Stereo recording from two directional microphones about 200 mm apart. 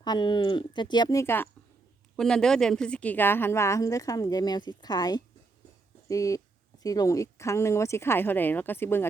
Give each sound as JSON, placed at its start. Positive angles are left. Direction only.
{"t": 0.0, "sound": "a woman's voice", "side_deg": 20}